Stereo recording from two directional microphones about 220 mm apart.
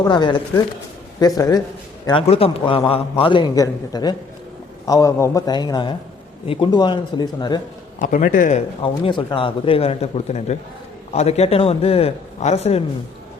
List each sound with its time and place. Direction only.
0.0 s a man's voice: 20° left (ahead or behind)
7.9 s speech: 40° left (ahead or behind)